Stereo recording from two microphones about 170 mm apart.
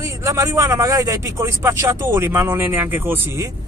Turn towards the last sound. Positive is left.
turn(degrees=-15)  # may be behind; listen again after turning